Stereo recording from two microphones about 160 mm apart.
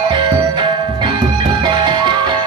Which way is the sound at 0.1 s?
30° right (ahead or behind).